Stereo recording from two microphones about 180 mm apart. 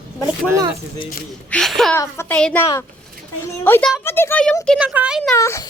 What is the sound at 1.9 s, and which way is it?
Speech, 15° left (ahead or behind).